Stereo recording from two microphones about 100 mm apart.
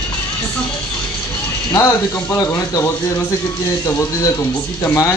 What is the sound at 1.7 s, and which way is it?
Speech, 30° left (ahead or behind).